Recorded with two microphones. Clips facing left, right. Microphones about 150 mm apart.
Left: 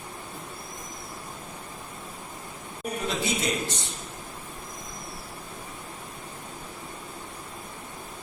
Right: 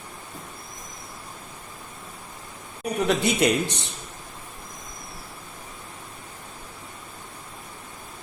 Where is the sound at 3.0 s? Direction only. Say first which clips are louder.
Right 7 dB; 65° right (ahead or behind).